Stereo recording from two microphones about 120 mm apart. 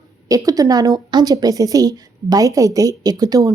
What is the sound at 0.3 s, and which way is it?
A woman's voice, 30° right (ahead or behind).